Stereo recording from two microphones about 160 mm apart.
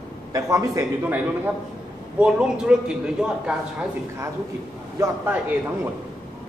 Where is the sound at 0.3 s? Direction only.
20° right (ahead or behind).